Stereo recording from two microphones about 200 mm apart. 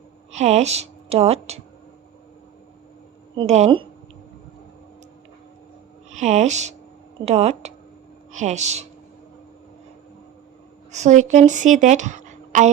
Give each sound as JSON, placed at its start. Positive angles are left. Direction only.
{"t": 0.3, "sound": "a woman's voice", "side_deg": -35}
{"t": 3.3, "sound": "a woman's voice", "side_deg": -35}
{"t": 6.1, "sound": "a woman's voice", "side_deg": -35}
{"t": 10.9, "sound": "a woman's voice", "side_deg": -35}